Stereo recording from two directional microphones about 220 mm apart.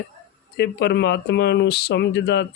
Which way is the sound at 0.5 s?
50° left (ahead or behind).